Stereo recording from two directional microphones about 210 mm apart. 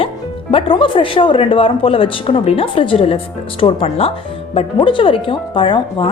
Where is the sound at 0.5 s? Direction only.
25° left (ahead or behind).